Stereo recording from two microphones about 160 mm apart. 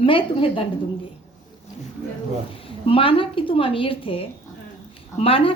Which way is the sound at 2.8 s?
35° left (ahead or behind).